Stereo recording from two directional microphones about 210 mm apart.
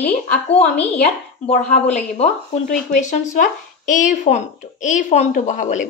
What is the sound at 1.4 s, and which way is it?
Speech, 30° left (ahead or behind).